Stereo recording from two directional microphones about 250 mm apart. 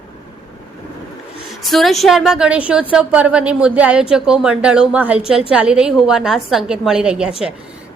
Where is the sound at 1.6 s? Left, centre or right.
Centre.